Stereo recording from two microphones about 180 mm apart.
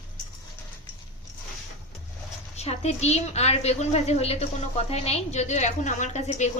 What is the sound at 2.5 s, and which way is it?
A woman's voice, 35° left (ahead or behind).